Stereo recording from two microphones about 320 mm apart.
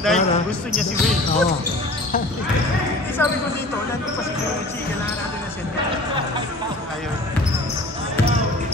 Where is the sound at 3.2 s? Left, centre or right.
Centre.